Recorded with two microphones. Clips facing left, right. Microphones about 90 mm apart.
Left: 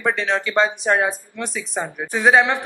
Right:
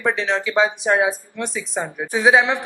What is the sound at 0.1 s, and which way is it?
Speech, centre (ahead or behind).